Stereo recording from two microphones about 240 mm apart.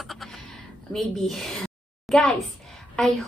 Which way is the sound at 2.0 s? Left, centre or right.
Centre.